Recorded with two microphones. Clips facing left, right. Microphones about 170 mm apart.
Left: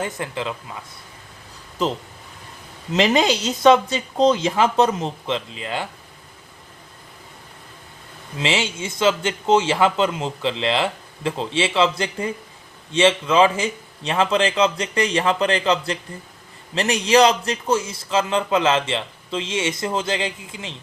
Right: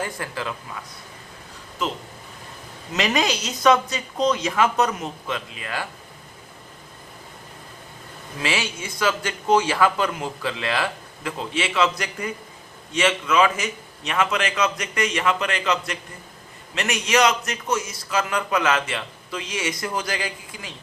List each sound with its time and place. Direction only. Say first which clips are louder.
0.0 s a man's voice: left 3 dB; 20° left (ahead or behind)
2.9 s a man's voice: left 5 dB; 30° left (ahead or behind)
8.4 s a man's voice: left 4 dB; 25° left (ahead or behind)